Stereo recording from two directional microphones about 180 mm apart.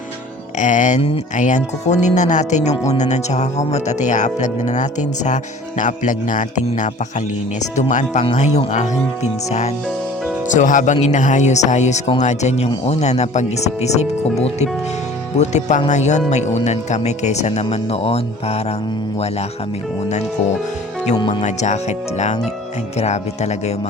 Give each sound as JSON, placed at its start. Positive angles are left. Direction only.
{"t": 0.6, "sound": "speech", "side_deg": 45}
{"t": 8.2, "sound": "speech", "side_deg": 30}
{"t": 8.5, "sound": "speech", "side_deg": 40}
{"t": 21.2, "sound": "speech", "side_deg": 25}
{"t": 21.4, "sound": "speech", "side_deg": 40}